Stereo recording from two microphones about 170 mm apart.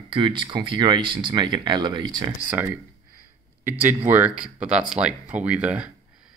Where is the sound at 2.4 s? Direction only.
10° right (ahead or behind).